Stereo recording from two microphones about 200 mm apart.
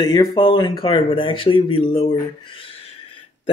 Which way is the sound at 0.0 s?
20° left (ahead or behind).